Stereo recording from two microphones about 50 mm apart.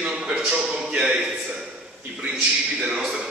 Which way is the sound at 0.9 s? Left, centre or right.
Centre.